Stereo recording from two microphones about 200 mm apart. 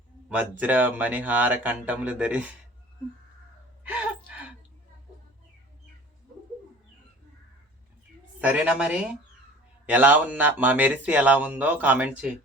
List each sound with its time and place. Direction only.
0.3 s speech: 5° right (ahead or behind)
8.4 s speech: 5° right (ahead or behind)